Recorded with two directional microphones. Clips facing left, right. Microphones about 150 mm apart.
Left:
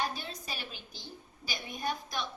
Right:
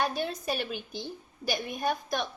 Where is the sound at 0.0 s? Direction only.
60° right (ahead or behind).